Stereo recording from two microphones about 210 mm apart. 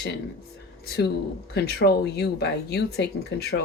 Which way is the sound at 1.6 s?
50° left (ahead or behind).